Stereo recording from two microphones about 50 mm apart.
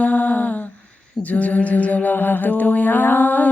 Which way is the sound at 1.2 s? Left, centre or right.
Left.